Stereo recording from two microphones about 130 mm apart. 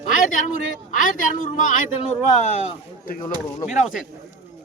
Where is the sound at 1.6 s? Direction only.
70° left (ahead or behind).